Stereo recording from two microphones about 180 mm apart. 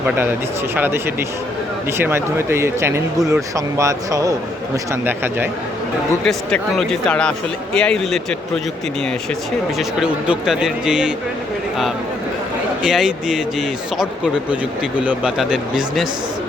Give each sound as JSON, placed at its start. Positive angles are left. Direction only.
{"t": 0.8, "sound": "speech", "side_deg": -15}
{"t": 6.2, "sound": "speech", "side_deg": 5}
{"t": 9.7, "sound": "speech", "side_deg": -5}
{"t": 12.8, "sound": "speech", "side_deg": -5}